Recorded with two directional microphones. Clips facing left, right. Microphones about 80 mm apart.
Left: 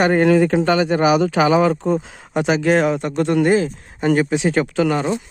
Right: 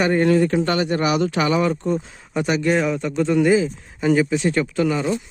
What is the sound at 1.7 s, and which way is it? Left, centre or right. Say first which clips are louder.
Speech: left 3 dB; left.